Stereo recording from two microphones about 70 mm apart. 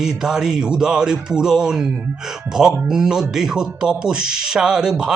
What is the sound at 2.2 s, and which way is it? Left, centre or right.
Speech, centre.